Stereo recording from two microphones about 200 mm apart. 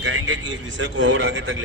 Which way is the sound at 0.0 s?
65° right (ahead or behind).